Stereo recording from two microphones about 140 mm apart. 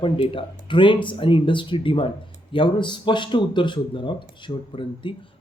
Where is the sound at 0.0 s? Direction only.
40° left (ahead or behind).